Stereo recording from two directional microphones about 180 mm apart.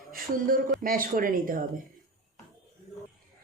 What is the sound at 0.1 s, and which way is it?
Speech, 50° right (ahead or behind).